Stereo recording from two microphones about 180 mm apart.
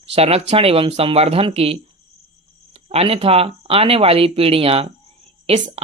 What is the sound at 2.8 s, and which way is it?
Speech, 35° right (ahead or behind).